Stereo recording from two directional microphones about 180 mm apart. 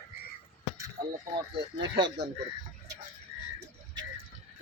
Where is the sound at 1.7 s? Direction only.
70° right (ahead or behind).